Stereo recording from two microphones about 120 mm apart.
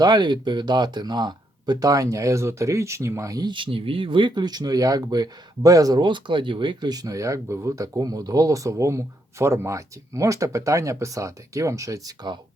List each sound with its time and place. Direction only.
0.0 s speech: 35° right (ahead or behind)